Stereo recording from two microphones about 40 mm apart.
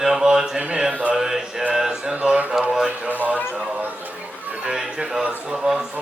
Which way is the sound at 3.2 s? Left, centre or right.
Right.